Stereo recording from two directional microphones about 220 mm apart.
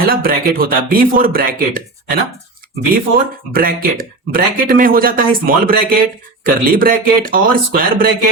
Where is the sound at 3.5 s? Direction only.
40° right (ahead or behind).